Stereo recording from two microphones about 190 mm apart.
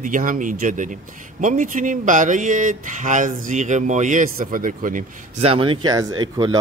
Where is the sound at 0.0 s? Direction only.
45° right (ahead or behind).